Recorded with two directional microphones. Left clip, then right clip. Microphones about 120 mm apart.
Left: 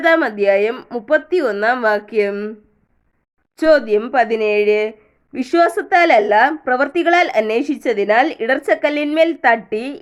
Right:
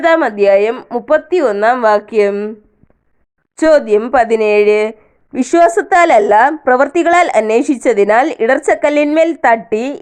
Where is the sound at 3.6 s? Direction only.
35° right (ahead or behind).